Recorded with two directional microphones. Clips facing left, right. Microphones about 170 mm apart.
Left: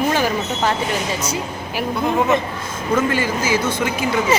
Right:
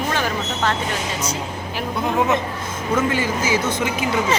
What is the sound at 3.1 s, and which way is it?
Speech, 20° right (ahead or behind).